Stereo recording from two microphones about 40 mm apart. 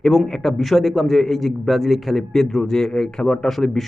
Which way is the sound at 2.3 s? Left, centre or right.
Centre.